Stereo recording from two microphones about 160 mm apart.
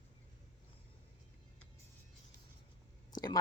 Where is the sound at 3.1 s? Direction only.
25° left (ahead or behind).